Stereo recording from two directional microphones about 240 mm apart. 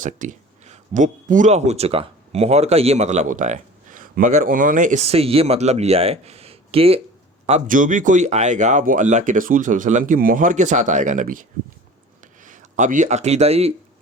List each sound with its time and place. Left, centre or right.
0.0 s speech: right
12.5 s speech: right